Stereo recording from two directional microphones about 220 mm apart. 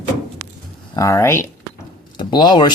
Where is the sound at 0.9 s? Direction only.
15° left (ahead or behind).